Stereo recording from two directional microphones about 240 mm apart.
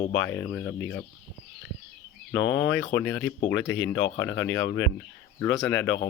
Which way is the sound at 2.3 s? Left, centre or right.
Left.